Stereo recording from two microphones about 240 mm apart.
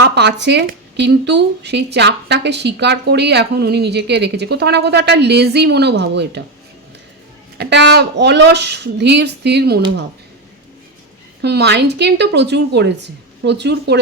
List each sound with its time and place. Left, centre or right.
0.0 s speech: right
7.6 s speech: right
11.4 s speech: right